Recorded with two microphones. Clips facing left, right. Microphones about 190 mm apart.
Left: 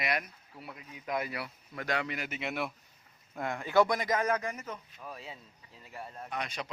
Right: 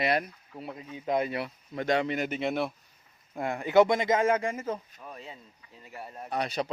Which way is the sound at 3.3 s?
15° right (ahead or behind).